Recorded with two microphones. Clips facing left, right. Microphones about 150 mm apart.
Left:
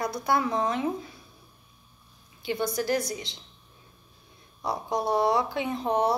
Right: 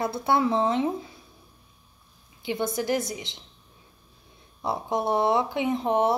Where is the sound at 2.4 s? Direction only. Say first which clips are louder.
Right 1 dB; 20° right (ahead or behind).